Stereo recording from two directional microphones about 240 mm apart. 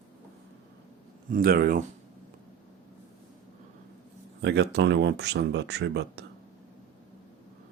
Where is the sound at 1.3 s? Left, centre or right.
Right.